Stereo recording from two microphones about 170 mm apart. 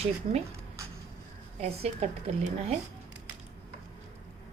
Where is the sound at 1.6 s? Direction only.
40° right (ahead or behind).